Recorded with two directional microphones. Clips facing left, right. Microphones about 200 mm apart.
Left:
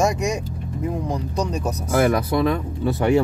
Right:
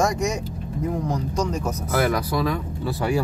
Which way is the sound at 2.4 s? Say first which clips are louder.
Left 4 dB; 25° left (ahead or behind).